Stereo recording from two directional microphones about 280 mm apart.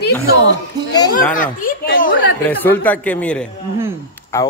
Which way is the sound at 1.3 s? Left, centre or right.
Left.